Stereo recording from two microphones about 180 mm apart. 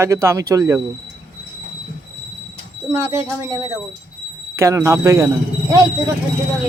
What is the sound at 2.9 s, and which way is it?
A man's voice, 15° right (ahead or behind).